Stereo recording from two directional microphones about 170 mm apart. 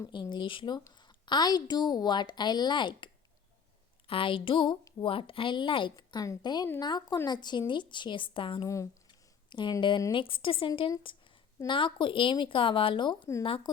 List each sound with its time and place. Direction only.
0.0 s a woman's voice: 25° left (ahead or behind)
8.6 s a woman's voice: 20° left (ahead or behind)